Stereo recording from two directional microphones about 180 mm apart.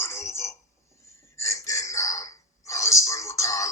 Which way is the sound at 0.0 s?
15° left (ahead or behind).